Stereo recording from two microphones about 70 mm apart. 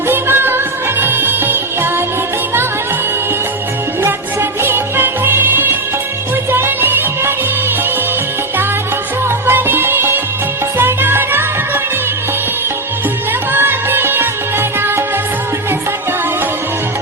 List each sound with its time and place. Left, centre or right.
0.1 s music: right
4.6 s music: right
9.5 s music: right
13.5 s music: right